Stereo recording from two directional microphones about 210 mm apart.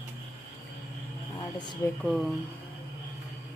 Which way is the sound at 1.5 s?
20° left (ahead or behind).